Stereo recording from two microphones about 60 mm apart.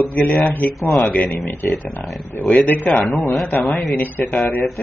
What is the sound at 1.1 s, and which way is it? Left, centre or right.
Speech, left.